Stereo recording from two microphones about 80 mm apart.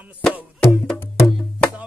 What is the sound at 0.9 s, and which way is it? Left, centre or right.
Music, left.